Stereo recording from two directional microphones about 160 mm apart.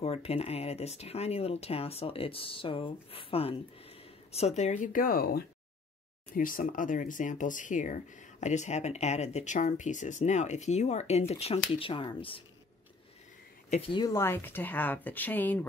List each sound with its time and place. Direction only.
0.0 s speech: 40° left (ahead or behind)
13.7 s speech: 35° left (ahead or behind); by 15.6 s 10° left (ahead or behind)